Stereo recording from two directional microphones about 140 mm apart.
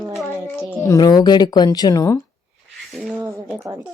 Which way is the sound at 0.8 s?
25° left (ahead or behind).